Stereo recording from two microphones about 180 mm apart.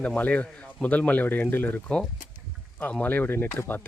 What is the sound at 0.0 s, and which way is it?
Speech, 5° left (ahead or behind).